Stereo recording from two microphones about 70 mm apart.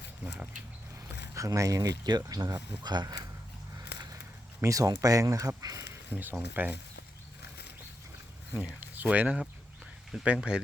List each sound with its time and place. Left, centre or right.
1.0 s a sound: right
2.0 s speech: right
2.8 s speech: right
3.8 s a sound: right
4.6 s speech: right
6.1 s speech: right
8.5 s speech: right
10.1 s speech: centre
10.5 s speech: centre